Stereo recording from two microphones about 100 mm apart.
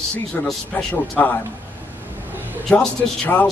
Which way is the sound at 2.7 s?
15° left (ahead or behind).